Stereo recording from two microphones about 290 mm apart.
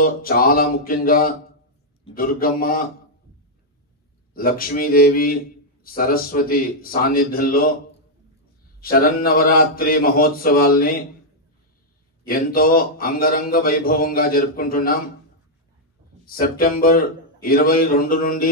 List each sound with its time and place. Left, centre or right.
0.0 s a man's voice: left
4.3 s speech: left
8.8 s speech: left
12.3 s speech: left
16.3 s a man's voice: left